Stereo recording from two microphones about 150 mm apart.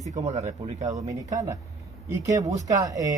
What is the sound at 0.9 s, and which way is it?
Speech, 25° right (ahead or behind).